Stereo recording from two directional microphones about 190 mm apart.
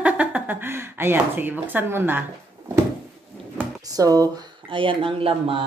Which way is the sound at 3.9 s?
20° right (ahead or behind).